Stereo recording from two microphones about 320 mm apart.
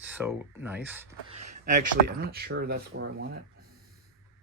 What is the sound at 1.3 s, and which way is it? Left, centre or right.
Speech, right.